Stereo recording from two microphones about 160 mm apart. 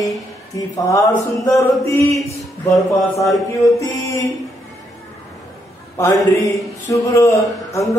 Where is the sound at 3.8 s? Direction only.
20° left (ahead or behind).